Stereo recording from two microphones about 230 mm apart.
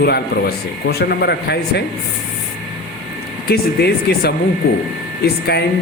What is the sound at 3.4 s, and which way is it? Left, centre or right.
Speech, left.